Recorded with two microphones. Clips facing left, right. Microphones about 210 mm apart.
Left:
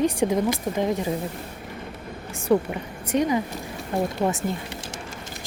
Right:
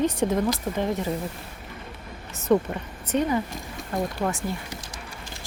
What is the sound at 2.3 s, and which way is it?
A woman's voice, 10° left (ahead or behind).